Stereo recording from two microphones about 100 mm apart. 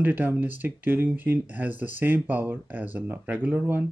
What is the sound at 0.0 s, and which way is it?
Speech, 20° right (ahead or behind).